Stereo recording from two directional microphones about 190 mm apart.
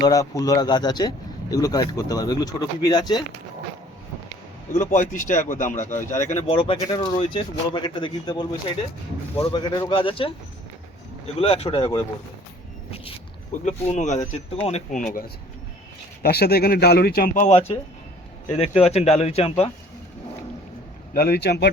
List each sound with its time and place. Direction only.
0.0 s speech: 20° left (ahead or behind)
4.7 s speech: 40° left (ahead or behind)
6.3 s speech: 30° left (ahead or behind)
11.3 s speech: 30° left (ahead or behind)
13.7 s speech: 40° left (ahead or behind)
16.2 s speech: 55° left (ahead or behind); by 19.7 s 30° left (ahead or behind)
21.1 s speech: 55° left (ahead or behind)